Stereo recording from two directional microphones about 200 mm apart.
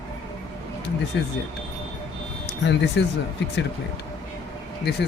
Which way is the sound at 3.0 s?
60° left (ahead or behind).